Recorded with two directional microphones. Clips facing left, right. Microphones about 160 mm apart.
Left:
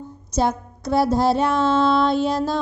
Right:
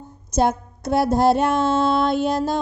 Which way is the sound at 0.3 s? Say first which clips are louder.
Right 2 dB; 50° right (ahead or behind).